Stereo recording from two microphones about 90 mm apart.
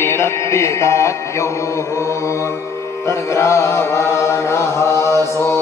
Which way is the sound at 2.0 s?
30° left (ahead or behind).